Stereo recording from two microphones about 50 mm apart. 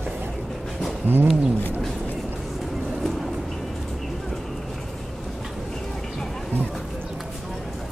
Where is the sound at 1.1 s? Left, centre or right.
Right.